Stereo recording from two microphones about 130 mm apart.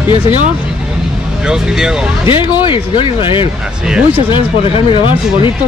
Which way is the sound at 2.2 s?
35° left (ahead or behind).